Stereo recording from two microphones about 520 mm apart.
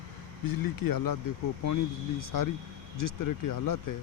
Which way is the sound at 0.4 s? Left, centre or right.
Left.